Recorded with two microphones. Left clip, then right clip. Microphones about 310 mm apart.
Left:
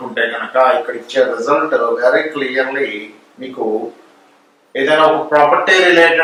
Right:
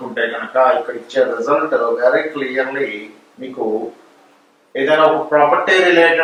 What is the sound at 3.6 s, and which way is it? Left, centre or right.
Speech, right.